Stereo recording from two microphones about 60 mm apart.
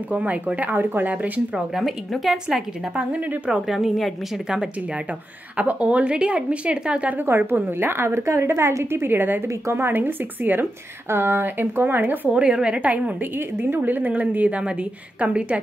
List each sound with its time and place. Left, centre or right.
0.1 s a woman's voice: right
1.8 s a woman's voice: centre
3.0 s a woman's voice: right
3.4 s a woman's voice: centre
5.6 s a woman's voice: right
7.2 s a woman's voice: right
12.3 s a woman's voice: centre